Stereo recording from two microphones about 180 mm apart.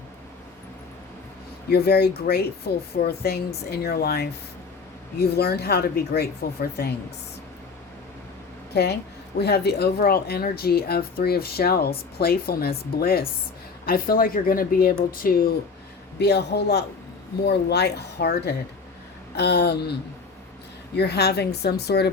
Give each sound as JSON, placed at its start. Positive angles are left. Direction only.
{"t": 1.7, "sound": "speech", "side_deg": 60}
{"t": 8.7, "sound": "a woman's voice", "side_deg": 65}
{"t": 16.1, "sound": "a man's voice", "side_deg": 70}